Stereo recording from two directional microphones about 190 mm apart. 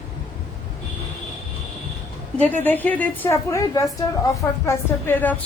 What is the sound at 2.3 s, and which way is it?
A woman's voice, 10° left (ahead or behind).